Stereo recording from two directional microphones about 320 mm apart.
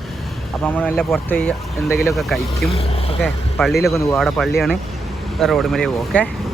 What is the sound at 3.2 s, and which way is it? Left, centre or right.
Speech, centre.